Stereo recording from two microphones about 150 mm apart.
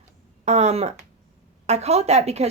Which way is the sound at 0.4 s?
45° right (ahead or behind).